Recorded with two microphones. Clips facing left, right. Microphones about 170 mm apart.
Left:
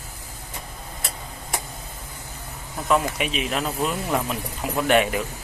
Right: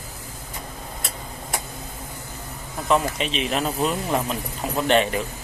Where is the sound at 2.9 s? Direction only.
5° left (ahead or behind).